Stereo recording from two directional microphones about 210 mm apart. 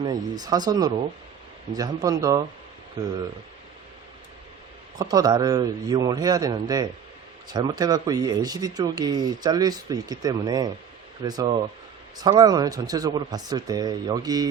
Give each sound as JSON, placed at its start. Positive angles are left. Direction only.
{"t": 0.0, "sound": "speech", "side_deg": -20}
{"t": 4.9, "sound": "speech", "side_deg": -20}